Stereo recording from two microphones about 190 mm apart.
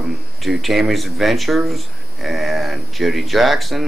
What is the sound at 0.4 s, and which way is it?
Speech, centre (ahead or behind).